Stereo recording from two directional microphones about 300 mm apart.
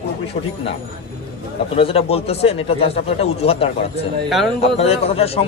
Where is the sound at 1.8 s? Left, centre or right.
Centre.